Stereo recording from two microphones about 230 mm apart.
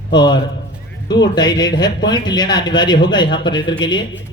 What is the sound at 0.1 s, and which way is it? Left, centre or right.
Speech, centre.